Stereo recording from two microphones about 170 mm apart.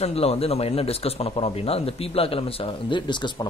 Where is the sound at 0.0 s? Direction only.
35° left (ahead or behind).